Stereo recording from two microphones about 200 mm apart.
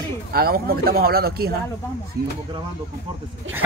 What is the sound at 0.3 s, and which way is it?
A man's voice, 50° right (ahead or behind).